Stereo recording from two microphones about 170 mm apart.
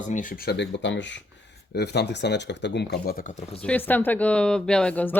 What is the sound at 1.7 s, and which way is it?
Speech, 75° left (ahead or behind).